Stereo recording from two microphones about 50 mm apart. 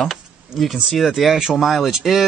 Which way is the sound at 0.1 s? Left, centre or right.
Centre.